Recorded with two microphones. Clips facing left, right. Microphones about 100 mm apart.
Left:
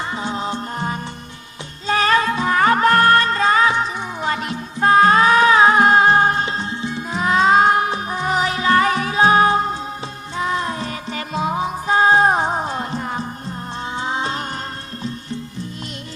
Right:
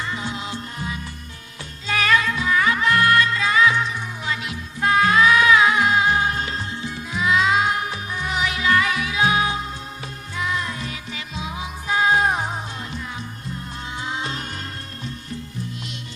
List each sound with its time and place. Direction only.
0.0 s music: 35° left (ahead or behind)
1.9 s music: 35° left (ahead or behind)
6.4 s music: 25° left (ahead or behind)
7.2 s music: 40° left (ahead or behind)